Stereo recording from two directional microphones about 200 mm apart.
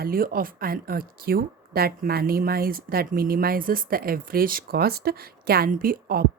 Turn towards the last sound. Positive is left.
turn(degrees=-45)  # may be behind; listen again after turning